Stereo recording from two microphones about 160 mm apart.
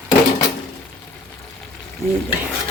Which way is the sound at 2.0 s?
15° right (ahead or behind).